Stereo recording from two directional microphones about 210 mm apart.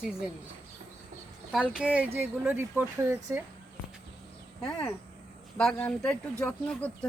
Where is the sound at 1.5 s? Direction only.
5° right (ahead or behind).